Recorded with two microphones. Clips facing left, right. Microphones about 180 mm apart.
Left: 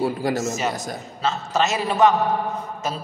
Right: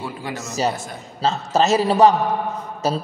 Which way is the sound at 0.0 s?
40° left (ahead or behind).